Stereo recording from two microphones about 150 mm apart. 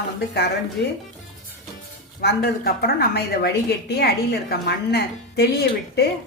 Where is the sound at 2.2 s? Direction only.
90° left.